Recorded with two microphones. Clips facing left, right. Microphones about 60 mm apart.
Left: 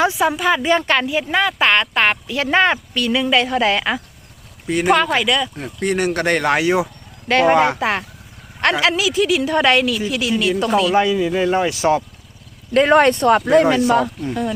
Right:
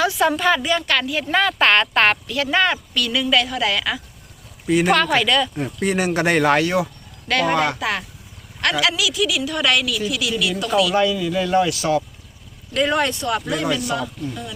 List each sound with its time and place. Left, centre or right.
0.2 s speech: centre
0.6 s speech: left
1.3 s speech: centre
2.2 s speech: left
4.6 s speech: centre
6.6 s speech: centre
7.3 s a woman's voice: left